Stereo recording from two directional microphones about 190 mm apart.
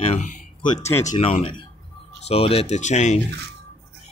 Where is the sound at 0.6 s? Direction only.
20° left (ahead or behind).